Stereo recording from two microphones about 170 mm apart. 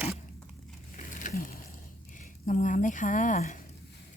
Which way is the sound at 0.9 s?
45° left (ahead or behind).